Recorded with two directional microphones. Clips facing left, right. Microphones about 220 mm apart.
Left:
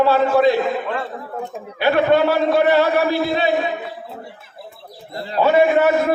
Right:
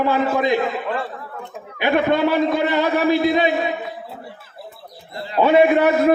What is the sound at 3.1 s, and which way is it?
Speech, 20° right (ahead or behind).